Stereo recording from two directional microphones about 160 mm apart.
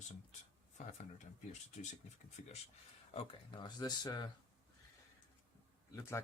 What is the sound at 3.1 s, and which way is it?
Speech, 35° left (ahead or behind).